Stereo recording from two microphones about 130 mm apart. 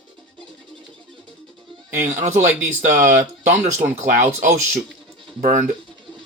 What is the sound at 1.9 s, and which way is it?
Speech, 75° right (ahead or behind).